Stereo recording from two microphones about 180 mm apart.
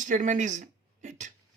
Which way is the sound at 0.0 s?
45° right (ahead or behind).